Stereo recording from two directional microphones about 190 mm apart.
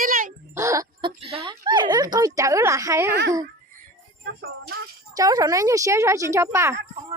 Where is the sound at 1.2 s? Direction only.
30° right (ahead or behind).